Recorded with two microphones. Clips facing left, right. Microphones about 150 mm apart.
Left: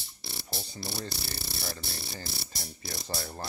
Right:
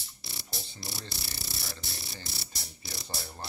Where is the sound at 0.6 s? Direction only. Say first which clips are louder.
Left 6 dB; 55° left (ahead or behind).